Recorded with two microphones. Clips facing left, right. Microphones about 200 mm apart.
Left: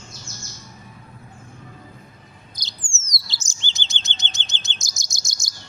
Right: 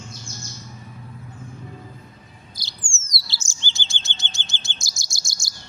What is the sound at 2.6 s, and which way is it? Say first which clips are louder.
Bird: even; 20° left (ahead or behind).